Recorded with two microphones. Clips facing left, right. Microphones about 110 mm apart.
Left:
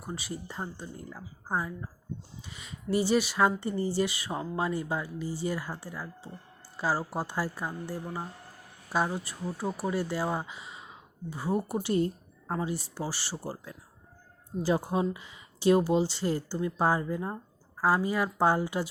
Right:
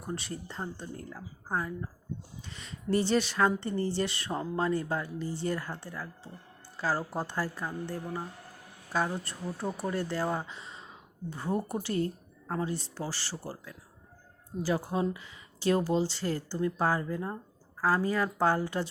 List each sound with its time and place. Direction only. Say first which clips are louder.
0.0 s speech: even; 5° left (ahead or behind)